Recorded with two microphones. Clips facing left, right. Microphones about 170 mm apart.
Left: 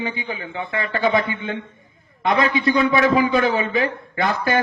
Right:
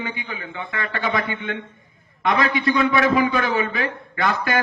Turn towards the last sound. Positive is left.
turn(degrees=25)  # may be behind; listen again after turning